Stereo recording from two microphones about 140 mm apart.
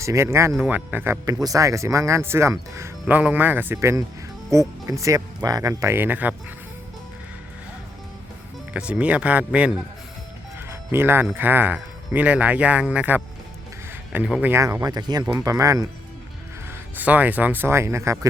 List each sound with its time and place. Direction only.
0.0 s speech: 20° right (ahead or behind)
1.2 s speech: 25° right (ahead or behind)
8.7 s speech: 10° right (ahead or behind)
10.7 s music: 15° right (ahead or behind)
11.3 s speech: 15° right (ahead or behind)
14.6 s speech: 25° right (ahead or behind)
17.0 s speech: 10° right (ahead or behind)